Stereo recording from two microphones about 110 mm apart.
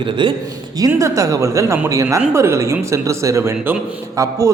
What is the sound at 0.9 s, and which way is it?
A man's voice, 30° right (ahead or behind).